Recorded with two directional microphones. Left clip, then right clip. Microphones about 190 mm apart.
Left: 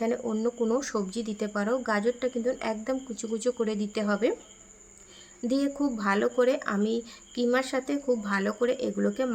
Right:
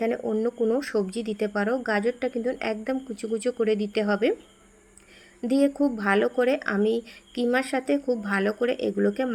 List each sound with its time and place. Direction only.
0.0 s speech: 5° right (ahead or behind)
5.4 s speech: 5° right (ahead or behind)
6.8 s a woman's voice: 35° left (ahead or behind)
7.1 s speech: 5° right (ahead or behind)